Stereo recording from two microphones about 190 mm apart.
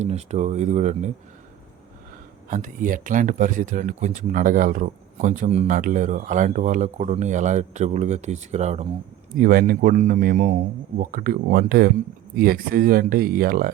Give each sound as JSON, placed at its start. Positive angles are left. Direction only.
{"t": 0.0, "sound": "speech", "side_deg": -35}
{"t": 2.5, "sound": "speech", "side_deg": -45}
{"t": 9.4, "sound": "speech", "side_deg": -50}